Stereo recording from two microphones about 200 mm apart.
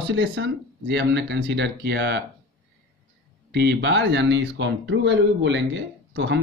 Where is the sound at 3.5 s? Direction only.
60° right (ahead or behind).